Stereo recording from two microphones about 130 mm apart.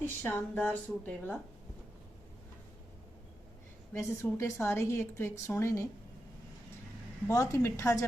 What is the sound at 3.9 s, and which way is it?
A woman's voice, 20° left (ahead or behind).